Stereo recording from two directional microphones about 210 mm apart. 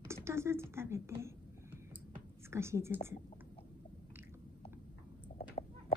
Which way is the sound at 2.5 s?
10° right (ahead or behind).